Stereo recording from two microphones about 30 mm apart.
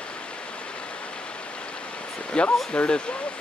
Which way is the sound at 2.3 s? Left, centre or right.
Left.